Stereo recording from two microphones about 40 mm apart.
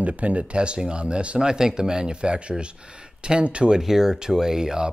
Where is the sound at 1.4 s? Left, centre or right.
Centre.